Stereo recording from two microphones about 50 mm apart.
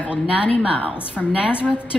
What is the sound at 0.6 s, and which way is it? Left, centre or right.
Speech, right.